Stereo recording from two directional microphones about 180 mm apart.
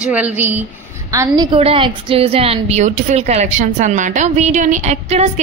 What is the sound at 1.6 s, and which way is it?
A woman's voice, 30° right (ahead or behind).